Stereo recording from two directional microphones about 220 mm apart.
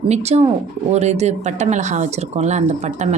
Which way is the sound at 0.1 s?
30° right (ahead or behind).